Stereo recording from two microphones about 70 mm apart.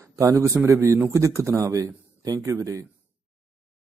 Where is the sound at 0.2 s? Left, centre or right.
Right.